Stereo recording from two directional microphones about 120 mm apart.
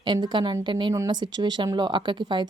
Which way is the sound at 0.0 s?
40° right (ahead or behind).